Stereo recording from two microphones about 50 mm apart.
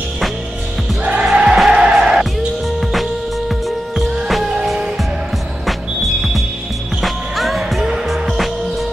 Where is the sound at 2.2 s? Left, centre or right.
Centre.